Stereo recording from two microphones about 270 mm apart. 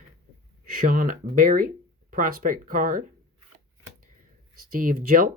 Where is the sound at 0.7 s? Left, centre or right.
Right.